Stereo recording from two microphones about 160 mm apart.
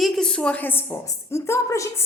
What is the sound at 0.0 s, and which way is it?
A woman's voice, 5° left (ahead or behind).